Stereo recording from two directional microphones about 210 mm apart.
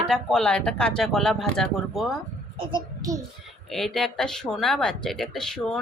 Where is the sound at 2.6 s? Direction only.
20° right (ahead or behind).